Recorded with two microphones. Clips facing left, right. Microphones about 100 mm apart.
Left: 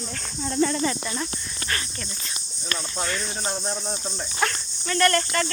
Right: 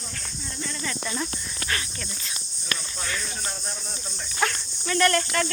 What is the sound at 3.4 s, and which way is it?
Cricket, 25° left (ahead or behind).